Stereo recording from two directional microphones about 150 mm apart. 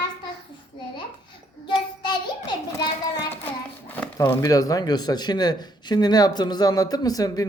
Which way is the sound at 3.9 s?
15° left (ahead or behind).